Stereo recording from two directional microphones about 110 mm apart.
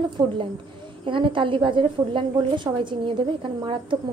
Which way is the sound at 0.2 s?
35° right (ahead or behind).